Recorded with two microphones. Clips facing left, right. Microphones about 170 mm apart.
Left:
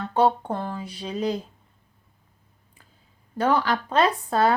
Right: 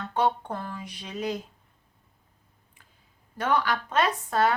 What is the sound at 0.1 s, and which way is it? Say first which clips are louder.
Speech: left 5 dB; 30° left (ahead or behind).